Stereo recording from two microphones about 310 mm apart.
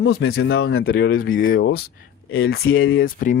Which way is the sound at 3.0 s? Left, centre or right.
Left.